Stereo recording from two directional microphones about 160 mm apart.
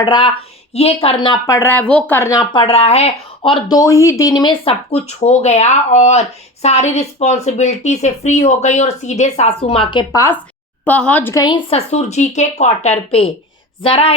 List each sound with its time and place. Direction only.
0.0 s speech: 30° left (ahead or behind)
4.6 s speech: 40° left (ahead or behind)
10.2 s a woman's voice: 15° left (ahead or behind)
11.4 s speech: 30° left (ahead or behind)
11.9 s speech: 45° left (ahead or behind)